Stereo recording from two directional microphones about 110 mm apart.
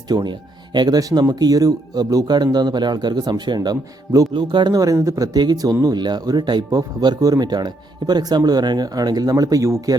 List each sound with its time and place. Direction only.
0.1 s speech: 40° right (ahead or behind)